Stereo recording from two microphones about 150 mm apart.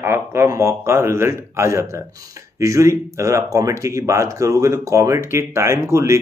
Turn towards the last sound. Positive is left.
turn(degrees=-20)  # may be behind; listen again after turning